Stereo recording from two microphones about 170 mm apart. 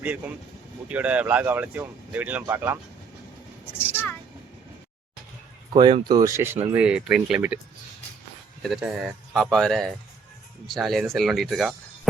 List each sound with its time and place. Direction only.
0.9 s speech: 10° right (ahead or behind)
3.9 s a sound: 10° left (ahead or behind)
5.7 s speech: 30° right (ahead or behind); by 7.6 s 5° right (ahead or behind)
8.6 s speech: 5° right (ahead or behind)